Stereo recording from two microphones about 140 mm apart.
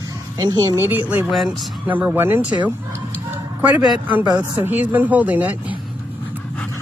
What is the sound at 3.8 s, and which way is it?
Speech, 10° right (ahead or behind).